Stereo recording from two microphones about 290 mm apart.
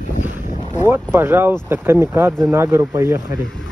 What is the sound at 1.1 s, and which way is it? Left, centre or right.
Speech, centre.